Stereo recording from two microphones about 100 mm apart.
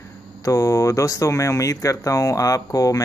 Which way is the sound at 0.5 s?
30° left (ahead or behind).